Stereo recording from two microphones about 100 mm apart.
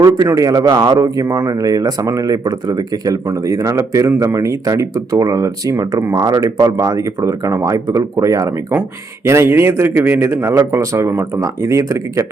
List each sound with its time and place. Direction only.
0.0 s a man's voice: 35° right (ahead or behind)